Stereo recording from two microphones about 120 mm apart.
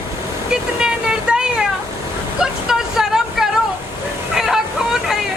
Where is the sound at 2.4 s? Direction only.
5° right (ahead or behind).